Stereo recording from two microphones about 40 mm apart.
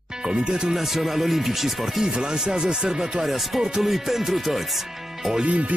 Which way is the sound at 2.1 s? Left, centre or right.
Centre.